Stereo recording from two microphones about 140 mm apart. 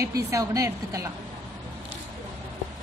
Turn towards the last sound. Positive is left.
turn(degrees=-20)  # may be behind; listen again after turning